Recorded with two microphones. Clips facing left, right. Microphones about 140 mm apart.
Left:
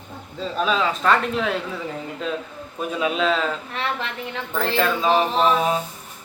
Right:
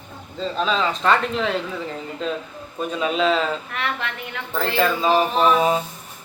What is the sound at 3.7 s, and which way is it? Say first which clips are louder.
Speech: even; 30° left (ahead or behind).